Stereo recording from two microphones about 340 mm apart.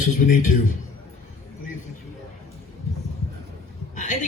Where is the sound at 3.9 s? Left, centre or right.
Left.